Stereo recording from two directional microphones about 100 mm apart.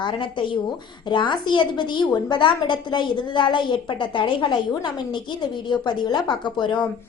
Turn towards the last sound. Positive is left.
turn(degrees=50)  # may be behind; listen again after turning